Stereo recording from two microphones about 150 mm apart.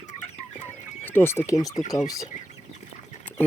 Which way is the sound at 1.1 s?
15° left (ahead or behind).